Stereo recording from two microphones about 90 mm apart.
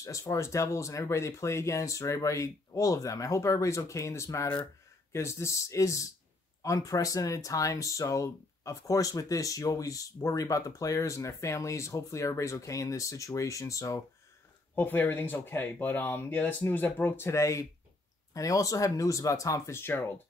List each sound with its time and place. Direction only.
0.0 s speech: 35° left (ahead or behind)
14.8 s speech: 20° left (ahead or behind)